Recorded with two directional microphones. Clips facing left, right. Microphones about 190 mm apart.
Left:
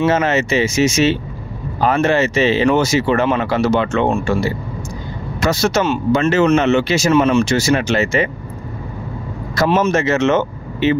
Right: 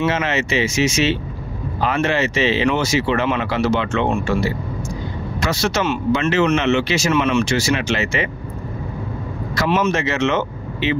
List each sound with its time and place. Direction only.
0.0 s speech: 45° left (ahead or behind)
5.4 s speech: 45° left (ahead or behind)
9.6 s speech: 40° left (ahead or behind)